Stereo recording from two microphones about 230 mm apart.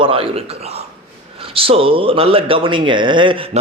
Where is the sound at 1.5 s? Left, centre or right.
Right.